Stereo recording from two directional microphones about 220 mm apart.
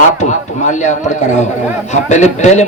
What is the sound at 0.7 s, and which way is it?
A man's voice, 35° left (ahead or behind).